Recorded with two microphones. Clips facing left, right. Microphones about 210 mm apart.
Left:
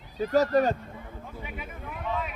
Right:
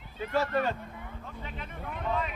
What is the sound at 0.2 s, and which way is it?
Speech, 40° left (ahead or behind).